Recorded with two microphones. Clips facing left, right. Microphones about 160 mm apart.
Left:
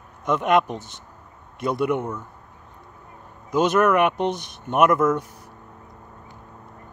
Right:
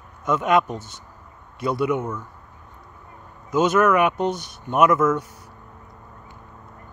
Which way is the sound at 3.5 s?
Centre (ahead or behind).